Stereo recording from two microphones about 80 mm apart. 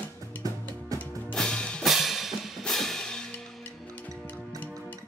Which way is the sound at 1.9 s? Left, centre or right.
Centre.